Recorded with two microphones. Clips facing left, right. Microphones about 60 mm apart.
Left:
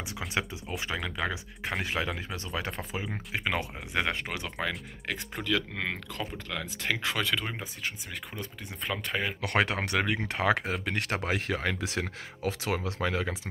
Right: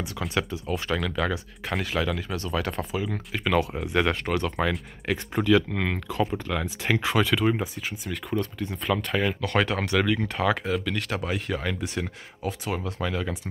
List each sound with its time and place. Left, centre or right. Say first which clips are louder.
0.3 s speech: right 5 dB; left
3.7 s speech: right 6 dB; centre
9.4 s speech: right 3 dB; left
11.2 s speech: right 1 dB; left
11.9 s speech: right 2 dB; left
13.0 s speech: right 1 dB; left